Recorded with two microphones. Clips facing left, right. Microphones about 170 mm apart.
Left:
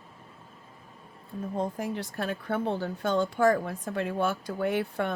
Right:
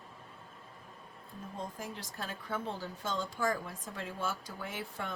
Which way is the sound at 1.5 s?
65° left (ahead or behind).